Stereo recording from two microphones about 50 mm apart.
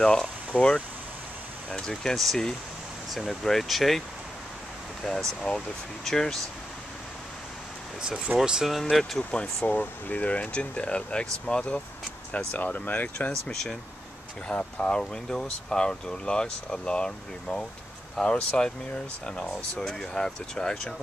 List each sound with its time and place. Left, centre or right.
0.0 s speech: centre
5.0 s speech: centre
5.5 s speech: centre
6.0 s speech: centre
8.4 s speech: centre
8.8 s speech: centre
9.3 s speech: left
9.7 s speech: left
12.4 s speech: left
13.3 s speech: centre
14.5 s speech: centre
19.8 s speech: centre